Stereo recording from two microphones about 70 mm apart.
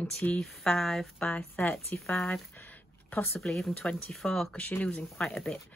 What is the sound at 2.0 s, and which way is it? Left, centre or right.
Speech, centre.